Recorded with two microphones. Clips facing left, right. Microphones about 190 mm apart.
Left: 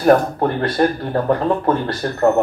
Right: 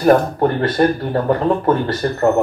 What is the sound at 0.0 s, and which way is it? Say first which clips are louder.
Speech: right 1 dB; centre (ahead or behind).